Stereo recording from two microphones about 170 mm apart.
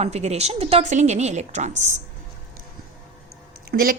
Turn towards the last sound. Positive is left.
turn(degrees=-60)  # may be behind; listen again after turning